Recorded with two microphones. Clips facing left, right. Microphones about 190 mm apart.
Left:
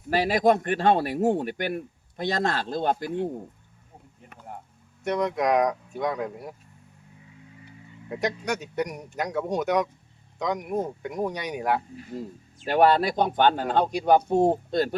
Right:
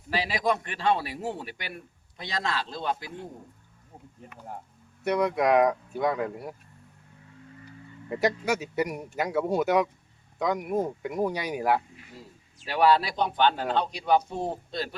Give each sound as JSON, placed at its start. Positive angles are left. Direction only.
{"t": 0.1, "sound": "speech", "side_deg": 50}
{"t": 5.0, "sound": "speech", "side_deg": -5}
{"t": 8.1, "sound": "speech", "side_deg": 0}
{"t": 12.6, "sound": "speech", "side_deg": 50}